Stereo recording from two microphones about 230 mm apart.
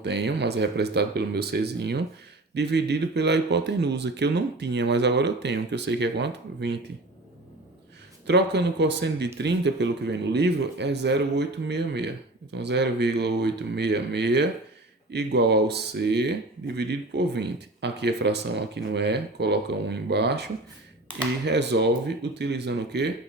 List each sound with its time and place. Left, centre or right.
0.0 s speech: right
8.3 s speech: right